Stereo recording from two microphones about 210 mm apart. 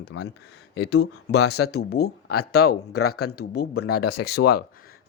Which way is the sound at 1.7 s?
50° left (ahead or behind).